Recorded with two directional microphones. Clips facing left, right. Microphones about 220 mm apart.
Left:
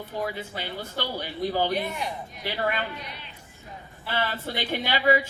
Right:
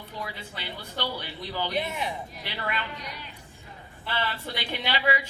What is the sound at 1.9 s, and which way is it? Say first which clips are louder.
Speech: even; centre (ahead or behind).